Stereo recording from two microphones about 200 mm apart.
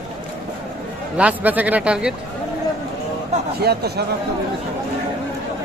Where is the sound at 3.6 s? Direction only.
55° right (ahead or behind).